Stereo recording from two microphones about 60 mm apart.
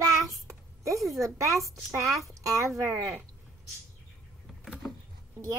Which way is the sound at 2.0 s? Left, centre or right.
Right.